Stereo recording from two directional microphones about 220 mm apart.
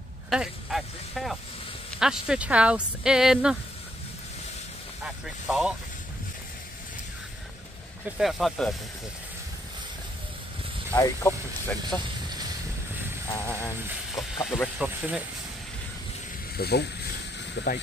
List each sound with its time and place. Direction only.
0.3 s speech: centre (ahead or behind)
5.0 s speech: 5° right (ahead or behind)
8.2 s speech: centre (ahead or behind)
11.0 s speech: 10° left (ahead or behind)
13.5 s speech: 10° left (ahead or behind)
13.8 s speech: centre (ahead or behind)
16.5 s speech: 45° left (ahead or behind)